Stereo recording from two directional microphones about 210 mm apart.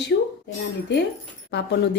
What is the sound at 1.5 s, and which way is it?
Speech, 55° left (ahead or behind).